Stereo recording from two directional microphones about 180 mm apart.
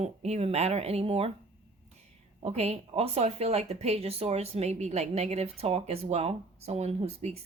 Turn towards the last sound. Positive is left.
turn(degrees=-35)  # may be behind; listen again after turning